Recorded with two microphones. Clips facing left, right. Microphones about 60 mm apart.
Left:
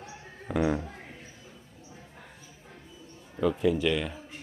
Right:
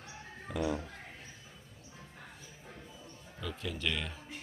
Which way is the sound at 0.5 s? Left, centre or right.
Left.